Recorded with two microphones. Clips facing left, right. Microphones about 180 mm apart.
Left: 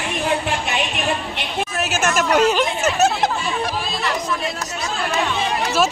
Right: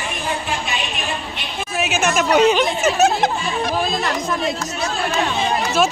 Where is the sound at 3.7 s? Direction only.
45° right (ahead or behind).